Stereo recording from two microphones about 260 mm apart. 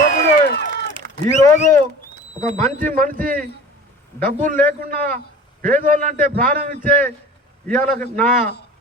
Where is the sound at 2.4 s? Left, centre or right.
Right.